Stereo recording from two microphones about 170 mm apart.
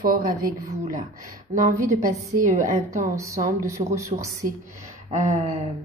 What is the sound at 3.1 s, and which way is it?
A woman's voice, 20° right (ahead or behind).